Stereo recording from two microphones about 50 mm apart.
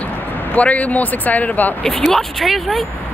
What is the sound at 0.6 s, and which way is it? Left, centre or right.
Speech, left.